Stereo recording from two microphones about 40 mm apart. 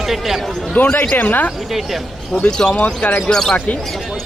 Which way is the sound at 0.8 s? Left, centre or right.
Left.